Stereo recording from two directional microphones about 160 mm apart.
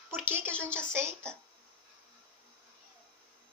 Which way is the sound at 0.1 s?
15° right (ahead or behind).